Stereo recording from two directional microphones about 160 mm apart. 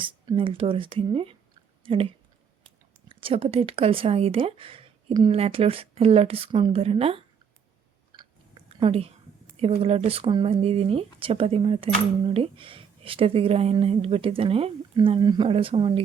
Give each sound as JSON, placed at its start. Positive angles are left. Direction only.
{"t": 0.0, "sound": "speech", "side_deg": -30}
{"t": 3.1, "sound": "speech", "side_deg": -35}
{"t": 8.1, "sound": "chewing", "side_deg": -30}
{"t": 9.6, "sound": "speech", "side_deg": -40}